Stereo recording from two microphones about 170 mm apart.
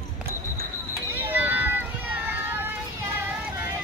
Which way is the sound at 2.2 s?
10° right (ahead or behind).